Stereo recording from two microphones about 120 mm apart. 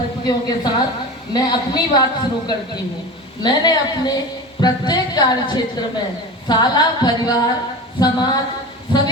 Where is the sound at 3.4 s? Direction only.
35° left (ahead or behind).